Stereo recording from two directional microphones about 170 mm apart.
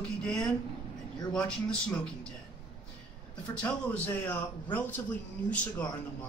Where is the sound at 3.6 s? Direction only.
10° left (ahead or behind).